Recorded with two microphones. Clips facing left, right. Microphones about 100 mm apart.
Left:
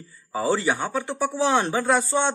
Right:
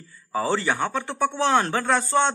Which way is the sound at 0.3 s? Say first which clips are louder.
Left 1 dB; 10° left (ahead or behind).